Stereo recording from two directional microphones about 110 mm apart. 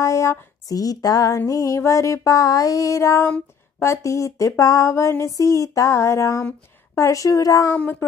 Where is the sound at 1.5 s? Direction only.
30° left (ahead or behind).